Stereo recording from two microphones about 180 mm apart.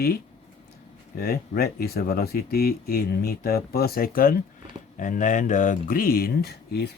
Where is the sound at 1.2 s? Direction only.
60° left (ahead or behind).